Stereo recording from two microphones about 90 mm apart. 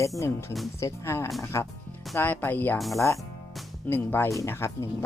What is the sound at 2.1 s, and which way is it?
Speech, 20° left (ahead or behind).